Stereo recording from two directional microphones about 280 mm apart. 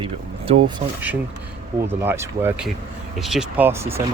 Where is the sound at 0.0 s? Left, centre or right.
Centre.